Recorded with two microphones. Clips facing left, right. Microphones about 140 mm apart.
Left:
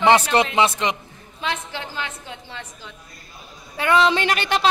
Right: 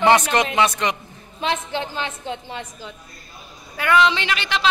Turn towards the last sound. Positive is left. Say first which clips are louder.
# left 2 dB
turn(degrees=45)  # may be behind; listen again after turning